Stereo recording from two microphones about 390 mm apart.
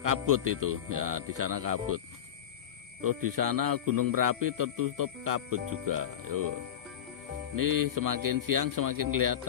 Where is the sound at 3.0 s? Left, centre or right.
Right.